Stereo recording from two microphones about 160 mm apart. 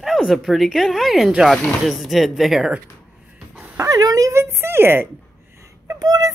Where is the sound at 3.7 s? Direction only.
20° right (ahead or behind).